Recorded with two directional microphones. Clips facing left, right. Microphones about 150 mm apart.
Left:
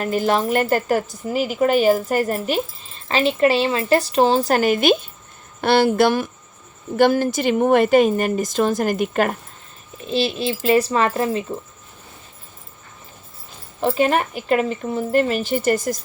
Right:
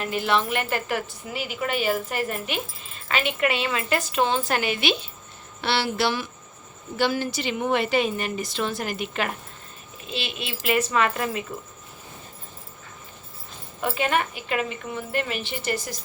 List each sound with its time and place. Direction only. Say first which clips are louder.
0.0 s a woman's voice: left 5 dB; 40° left (ahead or behind)
10.1 s speech: left 11 dB; 35° left (ahead or behind)
13.8 s speech: left 6 dB; 35° left (ahead or behind)